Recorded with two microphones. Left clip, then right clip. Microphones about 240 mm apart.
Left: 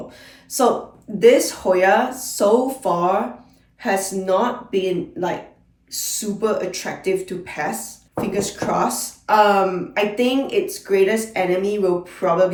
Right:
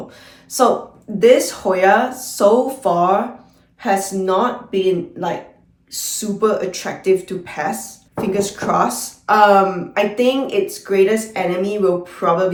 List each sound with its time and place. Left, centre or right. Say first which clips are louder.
0.5 s speech: right 3 dB; centre